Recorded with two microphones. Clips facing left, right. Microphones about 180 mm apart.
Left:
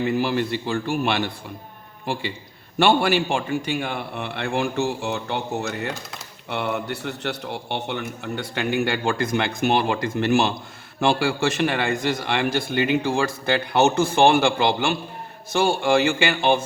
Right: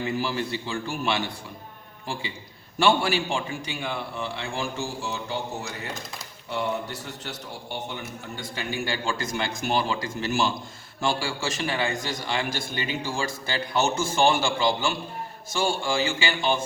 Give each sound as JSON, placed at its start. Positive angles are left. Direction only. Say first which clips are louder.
{"t": 0.0, "sound": "a man's voice", "louder": "left 6 dB", "side_deg": 60}
{"t": 2.7, "sound": "a man's voice", "louder": "left 4 dB", "side_deg": 60}